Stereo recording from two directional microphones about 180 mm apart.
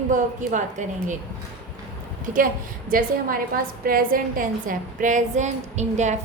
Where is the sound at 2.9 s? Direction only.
50° right (ahead or behind).